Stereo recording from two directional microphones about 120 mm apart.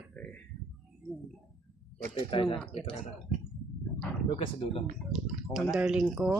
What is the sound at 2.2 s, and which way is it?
Speech, 45° left (ahead or behind).